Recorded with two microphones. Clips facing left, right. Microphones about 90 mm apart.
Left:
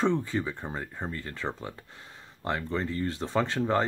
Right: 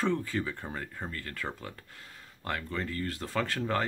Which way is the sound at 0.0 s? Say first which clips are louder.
Left 3 dB; 20° left (ahead or behind).